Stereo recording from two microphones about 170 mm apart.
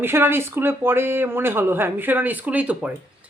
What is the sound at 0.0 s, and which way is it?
Speech, 15° right (ahead or behind).